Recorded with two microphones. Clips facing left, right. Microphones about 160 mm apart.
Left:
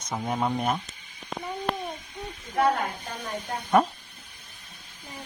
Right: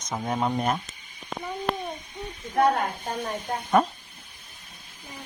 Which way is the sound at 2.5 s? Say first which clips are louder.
Right 2 dB; 55° right (ahead or behind).